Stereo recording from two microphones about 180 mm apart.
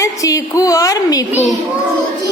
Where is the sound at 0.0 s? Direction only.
20° left (ahead or behind).